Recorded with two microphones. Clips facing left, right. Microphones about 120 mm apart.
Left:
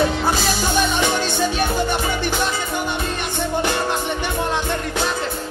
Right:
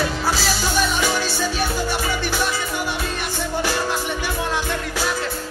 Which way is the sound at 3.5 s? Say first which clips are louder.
Left 2 dB; 20° left (ahead or behind).